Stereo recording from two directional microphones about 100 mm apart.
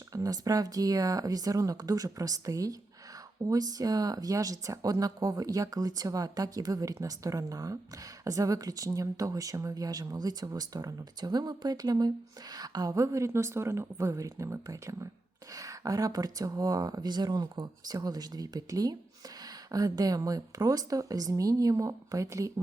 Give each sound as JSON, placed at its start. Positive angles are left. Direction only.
{"t": 0.1, "sound": "speech", "side_deg": -35}